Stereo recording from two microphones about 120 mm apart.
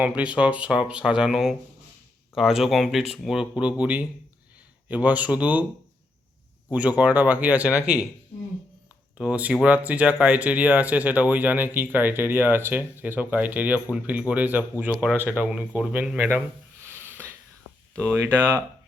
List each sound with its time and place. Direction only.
0.0 s speech: 10° right (ahead or behind)
6.7 s speech: 10° right (ahead or behind)
9.1 s speech: 10° right (ahead or behind)
16.9 s wheeze: 15° right (ahead or behind)
18.0 s speech: 15° right (ahead or behind)